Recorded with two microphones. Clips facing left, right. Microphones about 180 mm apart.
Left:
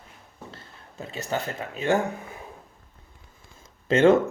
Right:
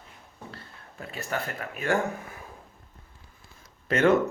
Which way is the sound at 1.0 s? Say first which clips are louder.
Left 3 dB; 25° left (ahead or behind).